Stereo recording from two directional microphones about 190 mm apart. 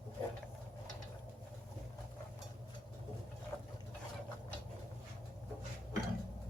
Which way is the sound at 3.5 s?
10° left (ahead or behind).